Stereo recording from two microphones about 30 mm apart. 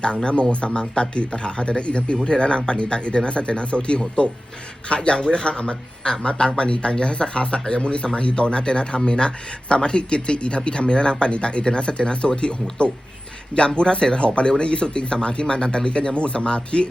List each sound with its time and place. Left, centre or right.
0.5 s speech: left